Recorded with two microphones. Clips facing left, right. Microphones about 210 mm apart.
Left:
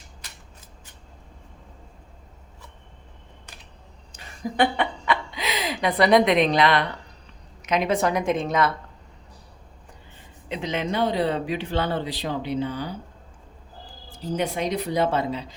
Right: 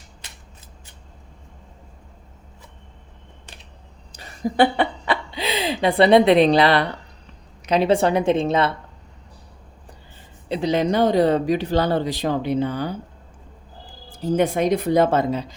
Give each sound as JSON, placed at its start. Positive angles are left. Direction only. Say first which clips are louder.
{"t": 4.1, "sound": "chuckle", "louder": "right 6 dB", "side_deg": -35}
{"t": 7.6, "sound": "speech", "louder": "right 5 dB", "side_deg": -30}
{"t": 10.5, "sound": "speech", "louder": "right 7 dB", "side_deg": -35}
{"t": 14.3, "sound": "speech", "louder": "right 6 dB", "side_deg": -50}